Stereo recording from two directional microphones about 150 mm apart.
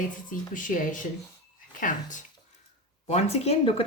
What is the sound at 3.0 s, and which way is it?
Speech, 45° left (ahead or behind).